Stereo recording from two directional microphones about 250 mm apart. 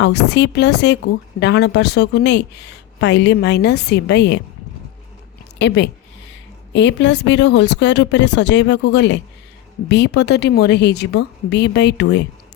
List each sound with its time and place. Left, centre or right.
0.0 s a woman's voice: left
5.5 s a woman's voice: left